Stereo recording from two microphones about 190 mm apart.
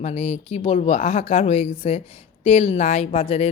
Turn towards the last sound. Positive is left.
turn(degrees=30)  # may be behind; listen again after turning